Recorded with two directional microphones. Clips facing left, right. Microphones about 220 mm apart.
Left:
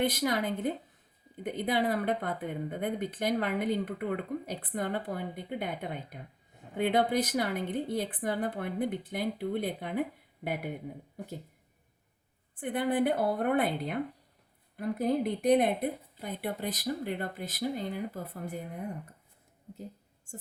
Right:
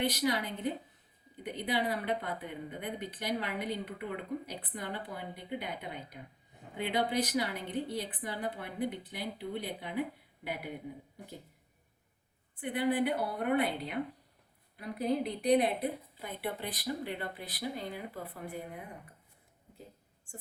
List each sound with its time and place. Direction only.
0.0 s speech: 50° left (ahead or behind)
12.5 s speech: 50° left (ahead or behind)